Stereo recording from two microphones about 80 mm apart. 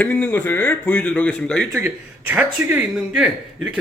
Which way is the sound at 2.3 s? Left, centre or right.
Right.